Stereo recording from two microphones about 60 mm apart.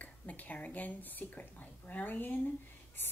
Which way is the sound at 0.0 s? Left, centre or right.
Left.